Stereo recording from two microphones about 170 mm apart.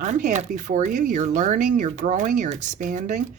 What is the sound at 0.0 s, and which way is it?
Speech, 45° right (ahead or behind).